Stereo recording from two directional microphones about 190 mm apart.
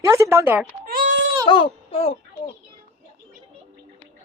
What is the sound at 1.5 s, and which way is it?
Speech, 25° left (ahead or behind).